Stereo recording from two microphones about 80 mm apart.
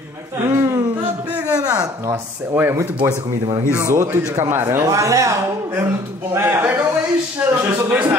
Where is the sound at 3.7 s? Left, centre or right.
Right.